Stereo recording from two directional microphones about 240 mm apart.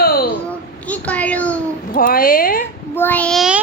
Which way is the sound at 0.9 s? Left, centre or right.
Centre.